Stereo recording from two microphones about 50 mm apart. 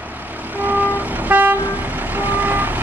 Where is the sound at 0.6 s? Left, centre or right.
Right.